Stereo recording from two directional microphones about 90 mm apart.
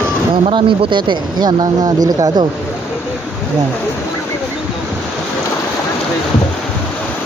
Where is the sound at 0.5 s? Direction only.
65° right (ahead or behind); by 2.3 s 45° right (ahead or behind).